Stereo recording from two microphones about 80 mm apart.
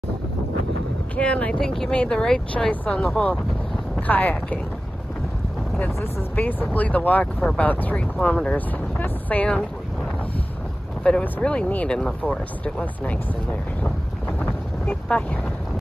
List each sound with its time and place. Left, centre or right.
1.1 s speech: centre
2.7 s speech: centre
6.7 s speech: centre
11.3 s speech: centre
14.4 s vehicle: centre